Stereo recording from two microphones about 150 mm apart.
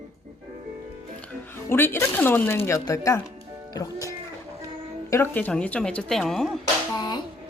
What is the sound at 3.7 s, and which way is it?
Music, 25° left (ahead or behind).